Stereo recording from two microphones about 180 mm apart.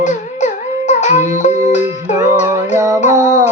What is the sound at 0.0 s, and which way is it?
Music, 40° left (ahead or behind).